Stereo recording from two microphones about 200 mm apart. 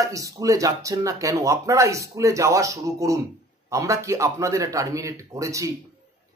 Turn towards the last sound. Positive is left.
turn(degrees=-15)  # may be behind; listen again after turning